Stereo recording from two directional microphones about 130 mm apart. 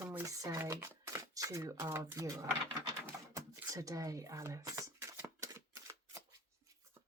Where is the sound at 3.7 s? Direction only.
25° right (ahead or behind).